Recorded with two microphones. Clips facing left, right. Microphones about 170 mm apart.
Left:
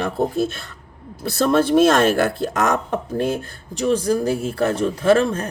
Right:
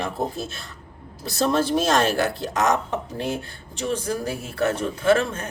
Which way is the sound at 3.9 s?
35° left (ahead or behind).